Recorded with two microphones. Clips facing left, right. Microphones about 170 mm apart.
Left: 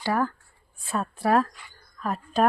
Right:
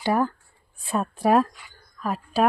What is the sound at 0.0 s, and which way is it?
A woman's voice, 20° right (ahead or behind).